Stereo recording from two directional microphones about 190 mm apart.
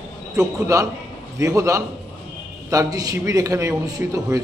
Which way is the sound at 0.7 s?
20° right (ahead or behind).